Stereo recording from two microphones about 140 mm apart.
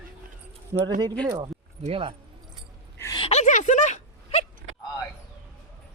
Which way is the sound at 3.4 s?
60° left (ahead or behind).